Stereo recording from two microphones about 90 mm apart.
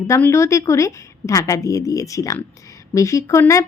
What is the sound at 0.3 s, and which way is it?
Speech, 30° left (ahead or behind).